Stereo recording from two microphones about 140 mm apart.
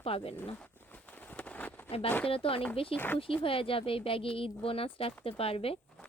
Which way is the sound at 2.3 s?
40° left (ahead or behind).